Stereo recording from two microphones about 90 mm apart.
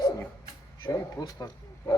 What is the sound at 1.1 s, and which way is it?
Speech, 45° left (ahead or behind).